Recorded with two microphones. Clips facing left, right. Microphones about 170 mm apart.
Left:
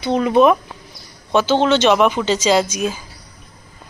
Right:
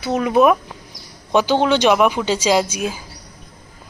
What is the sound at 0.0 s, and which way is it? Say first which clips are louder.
Speech: left 1 dB; 5° right (ahead or behind).